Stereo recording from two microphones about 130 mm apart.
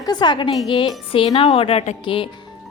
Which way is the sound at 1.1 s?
50° left (ahead or behind).